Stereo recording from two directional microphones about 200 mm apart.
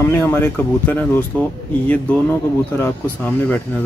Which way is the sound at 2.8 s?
10° left (ahead or behind).